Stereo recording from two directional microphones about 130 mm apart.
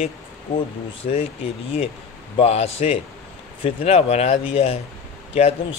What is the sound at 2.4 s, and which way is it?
Speech, 55° left (ahead or behind).